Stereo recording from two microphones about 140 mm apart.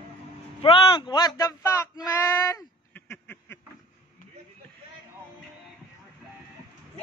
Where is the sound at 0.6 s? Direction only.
40° left (ahead or behind); by 3.5 s 15° left (ahead or behind).